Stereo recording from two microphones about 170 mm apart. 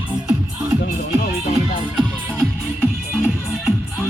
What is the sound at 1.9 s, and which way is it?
Music, 5° right (ahead or behind).